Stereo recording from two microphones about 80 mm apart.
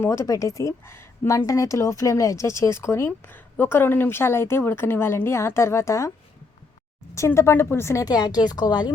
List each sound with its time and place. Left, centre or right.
0.0 s a woman's voice: left
7.1 s a woman's voice: left
8.0 s speech: left